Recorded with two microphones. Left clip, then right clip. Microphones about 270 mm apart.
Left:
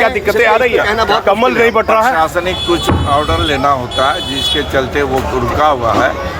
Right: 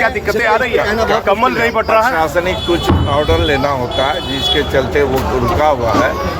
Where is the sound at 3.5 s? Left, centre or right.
Centre.